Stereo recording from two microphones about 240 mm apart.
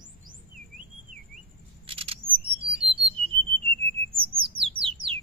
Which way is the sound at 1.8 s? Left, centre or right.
Right.